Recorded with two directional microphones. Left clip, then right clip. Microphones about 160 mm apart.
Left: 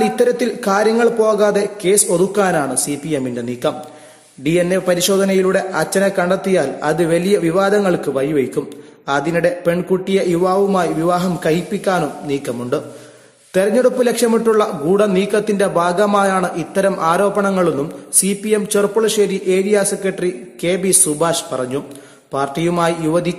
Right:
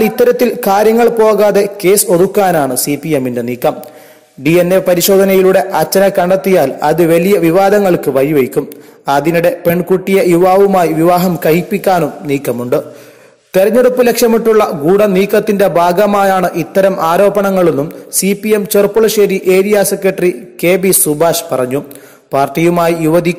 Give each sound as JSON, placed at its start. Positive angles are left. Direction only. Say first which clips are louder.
{"t": 0.0, "sound": "a man's voice", "louder": "right 6 dB", "side_deg": -40}